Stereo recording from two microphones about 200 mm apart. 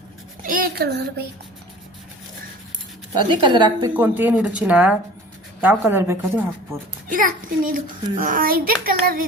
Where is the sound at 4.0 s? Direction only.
10° right (ahead or behind).